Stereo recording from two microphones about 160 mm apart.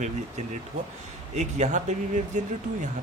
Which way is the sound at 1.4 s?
45° right (ahead or behind).